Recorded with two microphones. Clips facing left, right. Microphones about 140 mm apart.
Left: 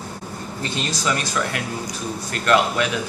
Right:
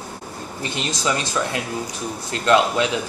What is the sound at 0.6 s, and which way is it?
Speech, 20° right (ahead or behind).